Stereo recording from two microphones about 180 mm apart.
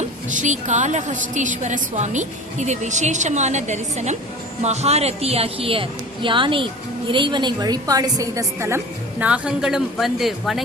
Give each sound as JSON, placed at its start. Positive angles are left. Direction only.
{"t": 0.3, "sound": "a woman's voice", "side_deg": -45}